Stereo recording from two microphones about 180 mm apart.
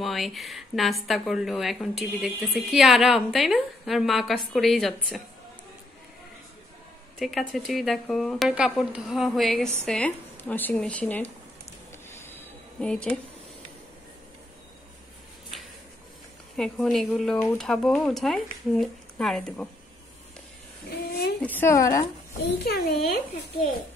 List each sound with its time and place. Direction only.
0.0 s speech: centre (ahead or behind)
7.2 s speech: centre (ahead or behind)
12.1 s a sound: 10° left (ahead or behind)
16.5 s speech: centre (ahead or behind)
21.0 s speech: 60° left (ahead or behind)
21.4 s speech: 10° left (ahead or behind)
22.6 s speech: 60° left (ahead or behind)